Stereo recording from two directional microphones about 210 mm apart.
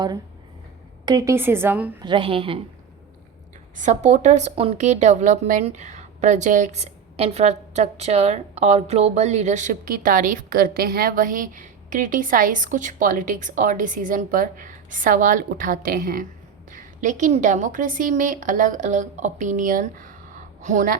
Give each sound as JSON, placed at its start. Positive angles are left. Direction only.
{"t": 1.0, "sound": "a woman's voice", "side_deg": -15}
{"t": 2.0, "sound": "a woman's voice", "side_deg": -25}
{"t": 3.8, "sound": "a woman's voice", "side_deg": -35}